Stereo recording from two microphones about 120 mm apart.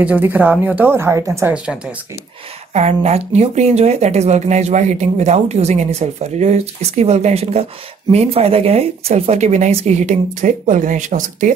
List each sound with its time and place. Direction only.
0.0 s speech: 15° right (ahead or behind)
2.7 s speech: 65° right (ahead or behind); by 11.5 s 90° right